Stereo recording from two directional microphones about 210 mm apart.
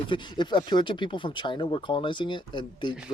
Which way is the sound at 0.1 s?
20° left (ahead or behind).